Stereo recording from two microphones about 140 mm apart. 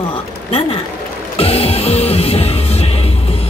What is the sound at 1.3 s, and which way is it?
Music, 45° left (ahead or behind).